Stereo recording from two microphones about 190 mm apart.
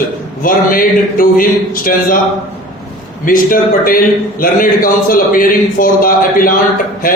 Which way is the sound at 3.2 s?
45° left (ahead or behind).